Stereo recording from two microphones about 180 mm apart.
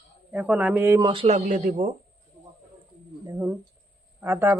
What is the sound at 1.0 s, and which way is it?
Speech, 30° right (ahead or behind).